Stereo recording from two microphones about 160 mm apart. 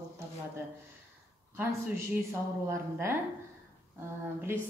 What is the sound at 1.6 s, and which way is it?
A woman's voice, 15° right (ahead or behind).